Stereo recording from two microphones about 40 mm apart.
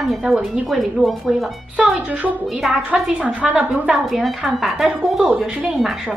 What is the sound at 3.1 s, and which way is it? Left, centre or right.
Speech, right.